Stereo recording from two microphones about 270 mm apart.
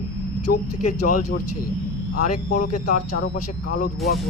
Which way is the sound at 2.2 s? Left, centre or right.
Left.